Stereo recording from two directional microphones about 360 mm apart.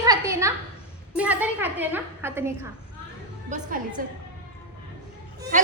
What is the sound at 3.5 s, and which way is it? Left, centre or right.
Speech, right.